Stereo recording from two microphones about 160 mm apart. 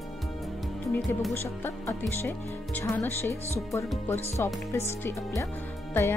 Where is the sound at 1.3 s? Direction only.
15° left (ahead or behind).